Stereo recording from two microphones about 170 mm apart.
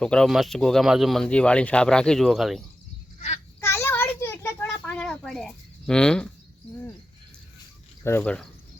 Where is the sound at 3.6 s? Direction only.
15° left (ahead or behind).